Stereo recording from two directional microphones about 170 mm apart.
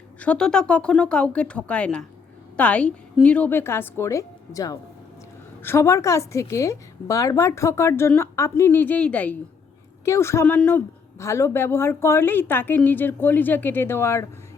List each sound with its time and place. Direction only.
0.2 s a woman's voice: 5° left (ahead or behind)